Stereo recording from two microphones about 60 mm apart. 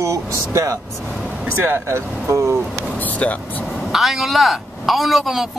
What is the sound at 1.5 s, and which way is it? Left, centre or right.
Speech, right.